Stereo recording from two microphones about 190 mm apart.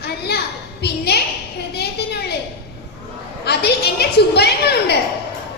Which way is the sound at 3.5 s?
60° left (ahead or behind).